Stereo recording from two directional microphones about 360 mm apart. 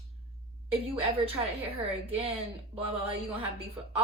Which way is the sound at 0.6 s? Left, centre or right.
Centre.